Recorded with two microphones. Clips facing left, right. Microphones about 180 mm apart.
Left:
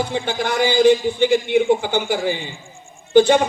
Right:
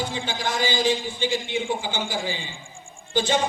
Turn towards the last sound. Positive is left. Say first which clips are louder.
# left 11 dB
turn(degrees=60)  # may be behind; listen again after turning